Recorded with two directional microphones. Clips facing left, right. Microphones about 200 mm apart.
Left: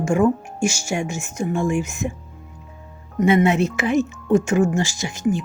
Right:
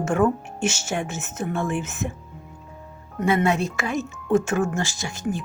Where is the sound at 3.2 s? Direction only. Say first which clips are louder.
Left 5 dB; 20° left (ahead or behind).